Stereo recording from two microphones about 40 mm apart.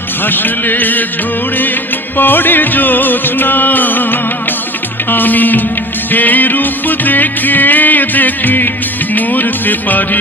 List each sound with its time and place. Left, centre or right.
0.3 s music: left
2.1 s music: left